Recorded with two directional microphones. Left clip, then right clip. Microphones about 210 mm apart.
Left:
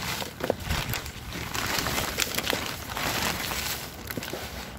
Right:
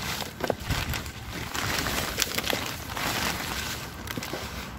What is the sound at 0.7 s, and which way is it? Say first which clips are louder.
Boat: even; 45° left (ahead or behind).